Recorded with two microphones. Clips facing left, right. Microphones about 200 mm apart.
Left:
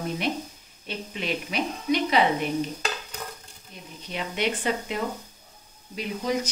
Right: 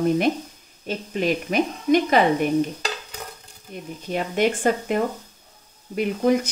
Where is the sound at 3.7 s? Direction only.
45° right (ahead or behind).